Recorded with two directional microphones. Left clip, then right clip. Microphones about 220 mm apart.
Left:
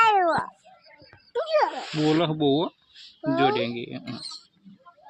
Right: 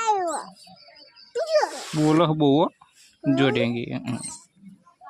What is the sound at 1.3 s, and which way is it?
Music, 20° left (ahead or behind).